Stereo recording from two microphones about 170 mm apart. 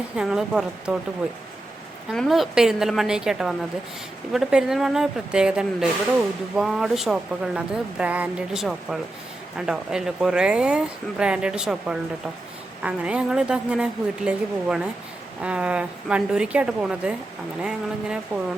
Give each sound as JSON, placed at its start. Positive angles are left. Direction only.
{"t": 0.2, "sound": "speech", "side_deg": -5}
{"t": 2.1, "sound": "a woman's voice", "side_deg": 0}